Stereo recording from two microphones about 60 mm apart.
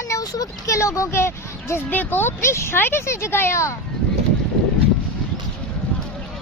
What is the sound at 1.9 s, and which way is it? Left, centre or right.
Speech, left.